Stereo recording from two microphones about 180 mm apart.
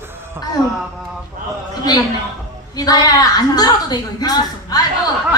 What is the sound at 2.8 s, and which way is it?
A woman's voice, 20° left (ahead or behind).